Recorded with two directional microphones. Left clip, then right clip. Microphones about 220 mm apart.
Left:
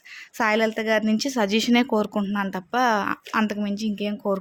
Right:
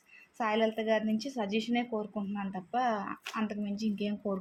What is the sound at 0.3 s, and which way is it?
Speech, 45° left (ahead or behind).